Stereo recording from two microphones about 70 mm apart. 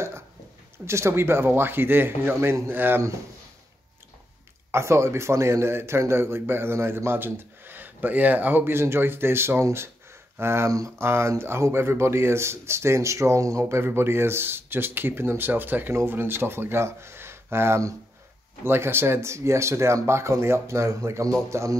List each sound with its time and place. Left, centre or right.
0.8 s speech: right
4.6 s speech: right